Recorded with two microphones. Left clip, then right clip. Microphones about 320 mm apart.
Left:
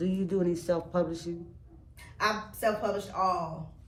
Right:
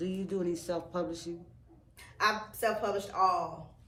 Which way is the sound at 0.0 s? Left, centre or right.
Left.